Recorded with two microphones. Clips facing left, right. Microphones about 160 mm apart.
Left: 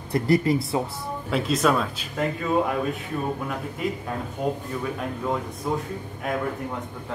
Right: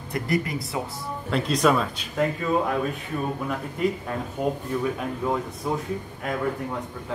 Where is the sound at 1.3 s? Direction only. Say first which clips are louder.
Right 1 dB; centre (ahead or behind).